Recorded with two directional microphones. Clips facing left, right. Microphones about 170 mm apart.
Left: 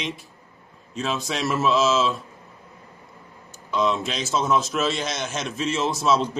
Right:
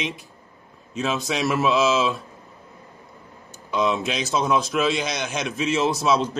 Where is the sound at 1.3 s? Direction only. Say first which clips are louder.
Right 2 dB; 15° right (ahead or behind).